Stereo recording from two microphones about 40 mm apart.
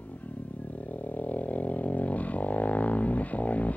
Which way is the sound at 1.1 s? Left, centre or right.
Left.